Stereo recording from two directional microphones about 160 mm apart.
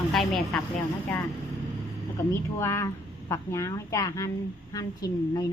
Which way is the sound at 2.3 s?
15° left (ahead or behind).